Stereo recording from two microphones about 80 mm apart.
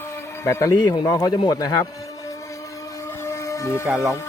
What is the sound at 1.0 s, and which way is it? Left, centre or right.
Speech, left.